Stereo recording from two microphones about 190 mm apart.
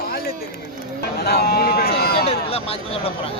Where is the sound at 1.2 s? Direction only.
55° left (ahead or behind).